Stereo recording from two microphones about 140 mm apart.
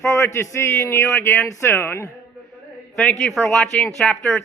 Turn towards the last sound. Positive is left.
turn(degrees=10)  # may be behind; listen again after turning